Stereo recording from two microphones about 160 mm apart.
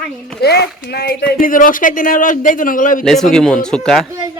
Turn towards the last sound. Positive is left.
turn(degrees=5)  # may be behind; listen again after turning